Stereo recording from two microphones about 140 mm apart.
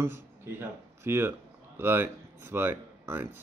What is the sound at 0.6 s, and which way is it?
A man's voice, 15° right (ahead or behind).